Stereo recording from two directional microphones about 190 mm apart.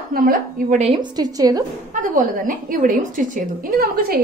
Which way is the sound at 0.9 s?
20° right (ahead or behind).